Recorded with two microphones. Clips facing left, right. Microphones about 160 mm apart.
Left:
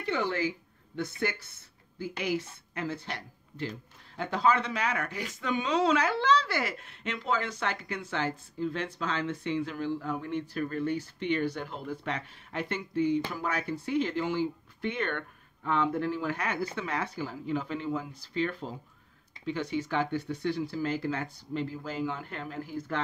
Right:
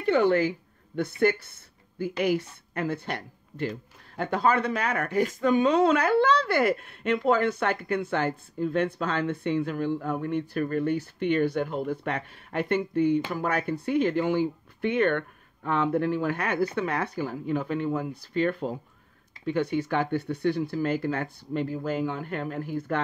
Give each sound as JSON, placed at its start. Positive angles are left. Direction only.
{"t": 0.0, "sound": "speech", "side_deg": -55}